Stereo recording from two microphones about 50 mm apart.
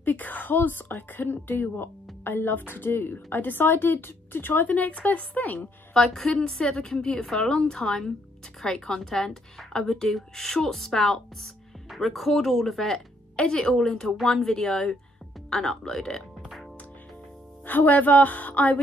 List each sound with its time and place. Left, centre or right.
0.0 s a woman's voice: left
4.6 s speech: left
5.9 s a woman's voice: centre
12.9 s a woman's voice: centre
17.6 s speech: left